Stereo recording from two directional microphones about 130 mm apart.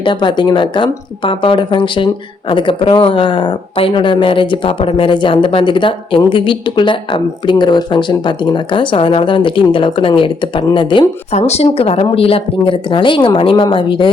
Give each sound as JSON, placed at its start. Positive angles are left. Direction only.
{"t": 0.0, "sound": "speech", "side_deg": 35}
{"t": 11.3, "sound": "speech", "side_deg": 55}